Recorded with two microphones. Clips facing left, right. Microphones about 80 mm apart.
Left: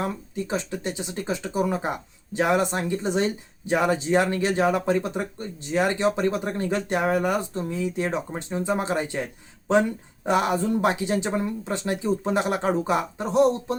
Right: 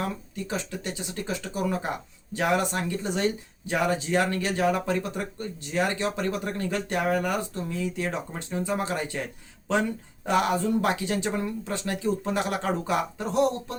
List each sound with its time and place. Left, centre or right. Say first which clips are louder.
0.3 s speech: left 4 dB; left